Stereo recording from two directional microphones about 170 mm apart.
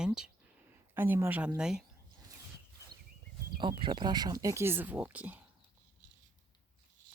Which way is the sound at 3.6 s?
30° right (ahead or behind).